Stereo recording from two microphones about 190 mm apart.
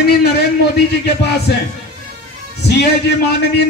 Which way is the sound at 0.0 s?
55° left (ahead or behind).